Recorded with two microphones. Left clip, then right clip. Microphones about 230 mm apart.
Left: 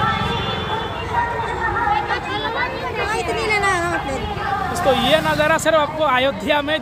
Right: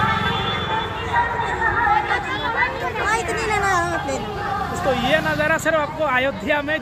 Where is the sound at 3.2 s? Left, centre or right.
Centre.